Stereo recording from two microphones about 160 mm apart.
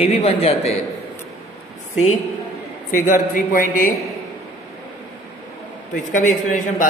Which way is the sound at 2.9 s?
55° left (ahead or behind).